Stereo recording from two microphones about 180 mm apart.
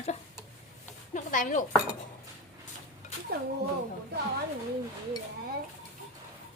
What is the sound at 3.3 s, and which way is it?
Speech, 60° right (ahead or behind).